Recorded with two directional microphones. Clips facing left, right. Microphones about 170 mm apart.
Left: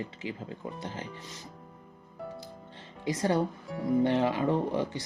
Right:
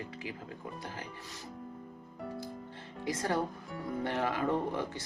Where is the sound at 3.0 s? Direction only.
20° left (ahead or behind).